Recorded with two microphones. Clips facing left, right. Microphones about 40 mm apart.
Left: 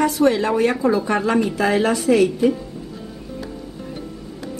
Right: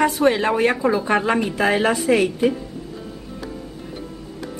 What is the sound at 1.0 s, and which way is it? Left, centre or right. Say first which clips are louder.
A woman's voice: even; right.